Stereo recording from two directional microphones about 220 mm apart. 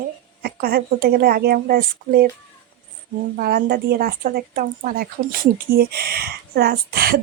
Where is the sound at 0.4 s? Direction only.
40° right (ahead or behind).